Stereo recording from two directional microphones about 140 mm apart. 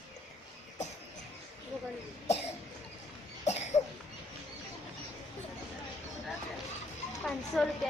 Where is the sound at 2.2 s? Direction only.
50° left (ahead or behind).